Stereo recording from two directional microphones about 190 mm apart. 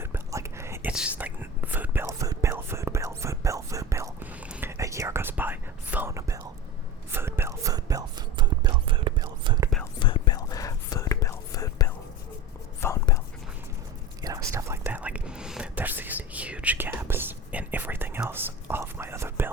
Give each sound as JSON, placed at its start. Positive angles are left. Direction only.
{"t": 0.0, "sound": "whispering", "side_deg": -15}
{"t": 10.0, "sound": "whispering", "side_deg": 25}
{"t": 14.2, "sound": "whispering", "side_deg": -20}